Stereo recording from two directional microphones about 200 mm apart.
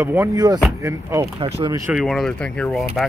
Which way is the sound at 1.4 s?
30° right (ahead or behind).